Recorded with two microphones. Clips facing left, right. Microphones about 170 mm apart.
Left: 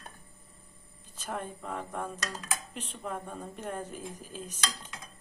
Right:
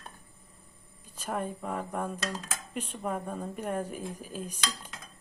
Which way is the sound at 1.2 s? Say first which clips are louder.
Right 4 dB; 5° right (ahead or behind).